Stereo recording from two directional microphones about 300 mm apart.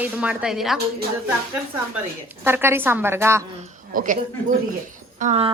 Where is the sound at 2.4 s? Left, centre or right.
Centre.